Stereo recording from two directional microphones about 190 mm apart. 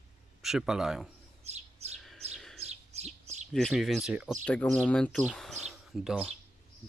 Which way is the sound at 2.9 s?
35° right (ahead or behind).